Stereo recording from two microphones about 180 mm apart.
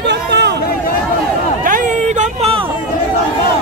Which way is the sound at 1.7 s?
40° right (ahead or behind).